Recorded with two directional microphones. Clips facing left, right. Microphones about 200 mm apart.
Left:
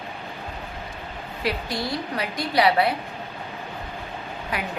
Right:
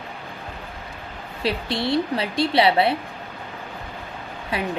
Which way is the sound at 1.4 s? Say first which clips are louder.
Right 3 dB; 25° right (ahead or behind).